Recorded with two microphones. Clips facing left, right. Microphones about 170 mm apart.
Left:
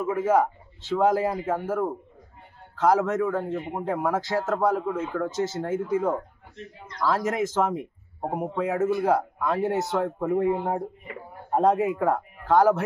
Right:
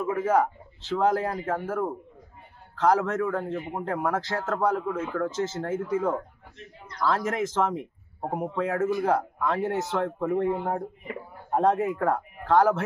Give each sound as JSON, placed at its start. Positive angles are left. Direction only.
{"t": 0.1, "sound": "a man's voice", "side_deg": 10}